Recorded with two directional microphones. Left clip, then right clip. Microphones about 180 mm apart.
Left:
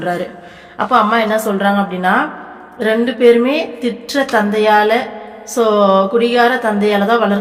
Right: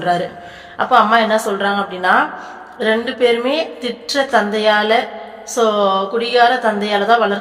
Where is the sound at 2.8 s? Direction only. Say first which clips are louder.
Left 4 dB; 30° left (ahead or behind).